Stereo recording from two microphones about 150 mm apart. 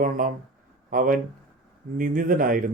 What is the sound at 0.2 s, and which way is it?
Speech, 60° right (ahead or behind).